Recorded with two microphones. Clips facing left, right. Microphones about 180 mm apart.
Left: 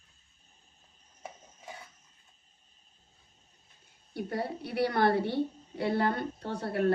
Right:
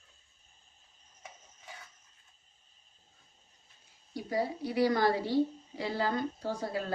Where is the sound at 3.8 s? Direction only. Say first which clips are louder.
Left 4 dB; 60° left (ahead or behind).